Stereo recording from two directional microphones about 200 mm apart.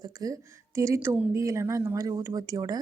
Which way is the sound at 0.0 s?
20° right (ahead or behind).